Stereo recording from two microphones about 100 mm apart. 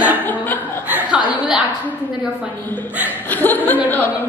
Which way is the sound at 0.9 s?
15° right (ahead or behind).